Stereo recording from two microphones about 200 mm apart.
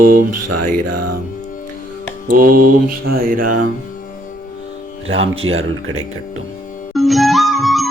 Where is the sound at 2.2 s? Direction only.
45° right (ahead or behind).